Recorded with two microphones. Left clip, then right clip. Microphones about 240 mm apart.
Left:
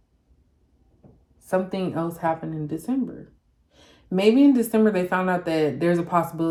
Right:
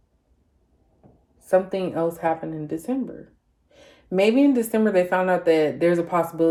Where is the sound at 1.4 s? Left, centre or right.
Centre.